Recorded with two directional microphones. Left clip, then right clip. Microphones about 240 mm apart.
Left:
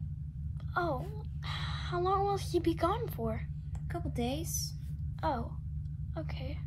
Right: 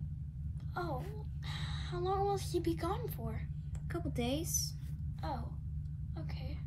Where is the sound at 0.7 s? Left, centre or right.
Centre.